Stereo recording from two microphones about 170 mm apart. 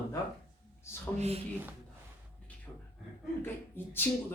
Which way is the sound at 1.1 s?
40° right (ahead or behind).